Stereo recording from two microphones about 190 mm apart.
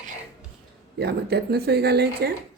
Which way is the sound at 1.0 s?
60° right (ahead or behind).